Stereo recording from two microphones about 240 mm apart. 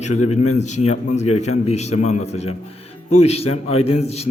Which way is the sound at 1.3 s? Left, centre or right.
Left.